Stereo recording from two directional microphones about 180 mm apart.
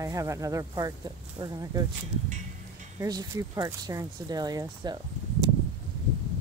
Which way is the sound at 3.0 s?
20° right (ahead or behind).